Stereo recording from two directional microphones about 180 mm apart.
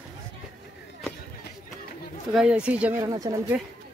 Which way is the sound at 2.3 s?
5° right (ahead or behind).